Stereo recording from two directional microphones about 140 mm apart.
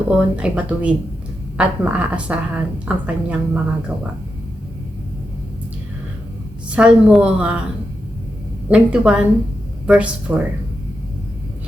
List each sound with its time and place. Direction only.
0.3 s a woman's voice: 5° right (ahead or behind)
6.7 s a woman's voice: 5° right (ahead or behind)
8.7 s a woman's voice: 5° right (ahead or behind)